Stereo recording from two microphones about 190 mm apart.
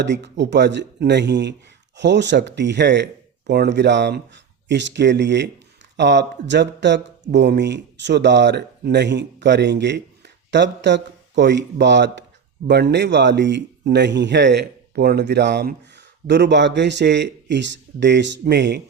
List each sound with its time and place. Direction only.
0.0 s a man's voice: 65° right (ahead or behind)